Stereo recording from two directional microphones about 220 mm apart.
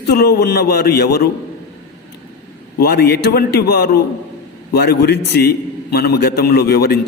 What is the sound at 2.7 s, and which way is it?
A man's voice, 45° left (ahead or behind).